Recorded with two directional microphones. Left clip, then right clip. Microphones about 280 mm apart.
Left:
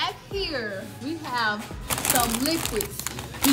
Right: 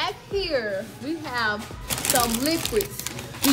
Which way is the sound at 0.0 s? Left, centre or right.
Centre.